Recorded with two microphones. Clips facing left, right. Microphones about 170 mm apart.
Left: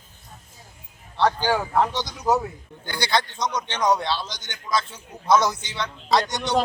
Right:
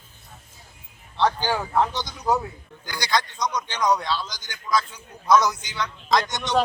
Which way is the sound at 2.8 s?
25° left (ahead or behind).